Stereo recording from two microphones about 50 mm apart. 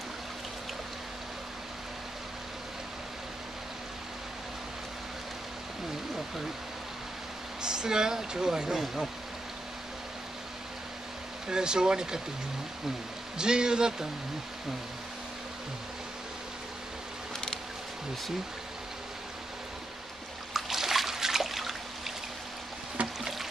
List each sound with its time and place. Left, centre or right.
7.6 s speech: centre
11.4 s speech: centre
13.4 s speech: centre
20.5 s water: centre
23.0 s boat: right